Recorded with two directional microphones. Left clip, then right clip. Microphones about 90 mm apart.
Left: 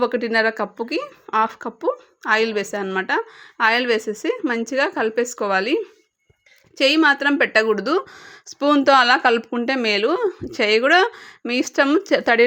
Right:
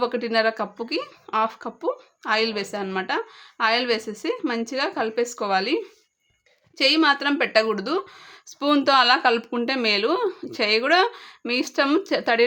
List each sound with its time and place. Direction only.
0.0 s speech: 40° left (ahead or behind)
3.1 s speech: 45° left (ahead or behind)
7.9 s speech: 60° left (ahead or behind); by 10.3 s 30° left (ahead or behind)
10.4 s speech: 40° left (ahead or behind)